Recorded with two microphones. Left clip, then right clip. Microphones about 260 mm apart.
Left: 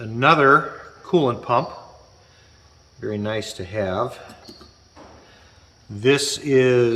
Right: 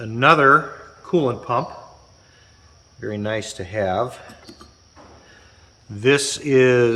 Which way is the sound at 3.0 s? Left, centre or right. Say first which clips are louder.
Right 1 dB; centre.